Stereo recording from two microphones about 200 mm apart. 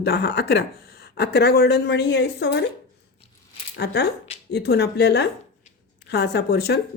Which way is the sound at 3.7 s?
55° left (ahead or behind).